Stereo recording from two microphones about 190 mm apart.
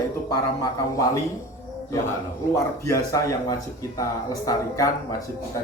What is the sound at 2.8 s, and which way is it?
Speech, 15° left (ahead or behind).